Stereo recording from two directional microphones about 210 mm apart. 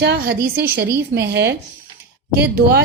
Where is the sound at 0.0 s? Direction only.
50° right (ahead or behind).